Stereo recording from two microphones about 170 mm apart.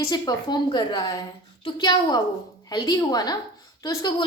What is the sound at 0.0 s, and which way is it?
A woman's voice, 25° left (ahead or behind).